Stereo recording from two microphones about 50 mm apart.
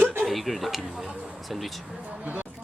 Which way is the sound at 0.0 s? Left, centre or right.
Right.